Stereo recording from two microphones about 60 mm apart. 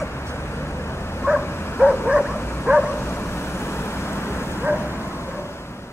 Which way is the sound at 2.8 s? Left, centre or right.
Left.